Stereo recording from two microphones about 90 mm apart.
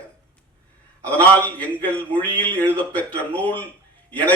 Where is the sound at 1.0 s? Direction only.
15° left (ahead or behind).